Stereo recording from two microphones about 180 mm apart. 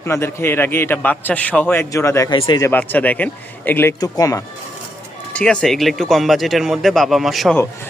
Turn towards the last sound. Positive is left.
turn(degrees=0)  # may be behind; listen again after turning